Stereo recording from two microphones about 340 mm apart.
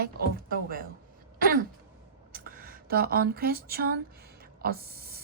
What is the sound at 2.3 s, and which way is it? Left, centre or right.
Speech, right.